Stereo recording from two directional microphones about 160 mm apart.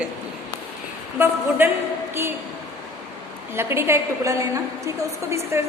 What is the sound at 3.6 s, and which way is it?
A woman's voice, 15° right (ahead or behind).